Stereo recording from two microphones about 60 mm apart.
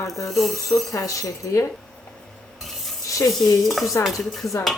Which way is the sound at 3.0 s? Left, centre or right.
Left.